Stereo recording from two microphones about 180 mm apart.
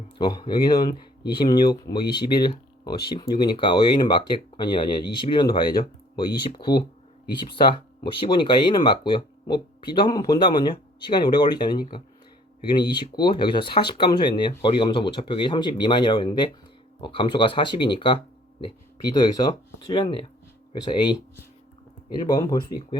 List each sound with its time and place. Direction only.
0.2 s speech: 25° left (ahead or behind)
22.3 s speech: 20° left (ahead or behind)